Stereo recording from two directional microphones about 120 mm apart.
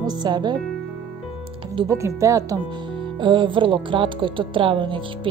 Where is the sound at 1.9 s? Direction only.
25° right (ahead or behind).